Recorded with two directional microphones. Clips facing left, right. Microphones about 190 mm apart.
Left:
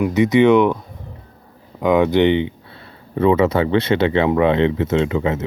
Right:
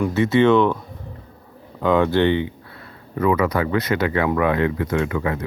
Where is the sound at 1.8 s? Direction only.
15° left (ahead or behind).